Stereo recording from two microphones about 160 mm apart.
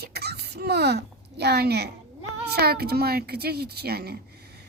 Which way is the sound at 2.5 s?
80° right.